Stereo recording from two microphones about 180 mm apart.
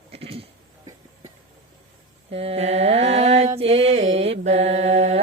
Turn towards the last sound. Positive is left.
turn(degrees=-40)  # may be behind; listen again after turning